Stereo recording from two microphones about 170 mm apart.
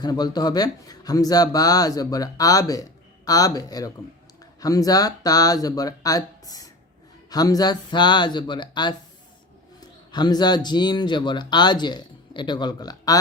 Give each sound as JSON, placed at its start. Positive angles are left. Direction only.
{"t": 0.0, "sound": "speech", "side_deg": 25}
{"t": 10.1, "sound": "speech", "side_deg": 25}